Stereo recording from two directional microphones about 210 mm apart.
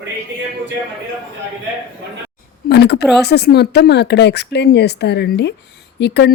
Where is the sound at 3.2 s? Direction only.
50° left (ahead or behind).